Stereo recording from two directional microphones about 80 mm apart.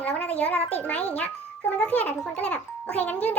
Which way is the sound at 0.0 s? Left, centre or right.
Centre.